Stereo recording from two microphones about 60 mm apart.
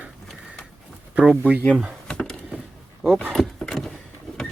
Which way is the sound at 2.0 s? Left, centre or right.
Centre.